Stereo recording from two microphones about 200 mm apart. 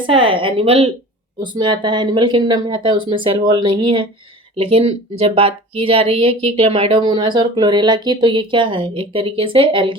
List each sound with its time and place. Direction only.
0.0 s speech: 25° right (ahead or behind)